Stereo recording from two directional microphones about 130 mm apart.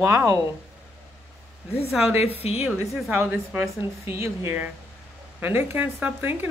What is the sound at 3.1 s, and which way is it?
Speech, 15° right (ahead or behind).